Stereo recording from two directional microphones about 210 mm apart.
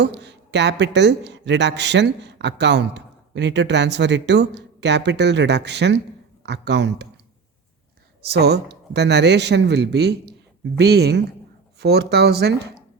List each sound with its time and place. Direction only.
0.0 s speech: 55° right (ahead or behind)
8.2 s speech: 50° right (ahead or behind)